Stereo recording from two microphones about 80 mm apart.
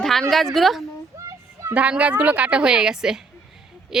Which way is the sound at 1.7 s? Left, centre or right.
Centre.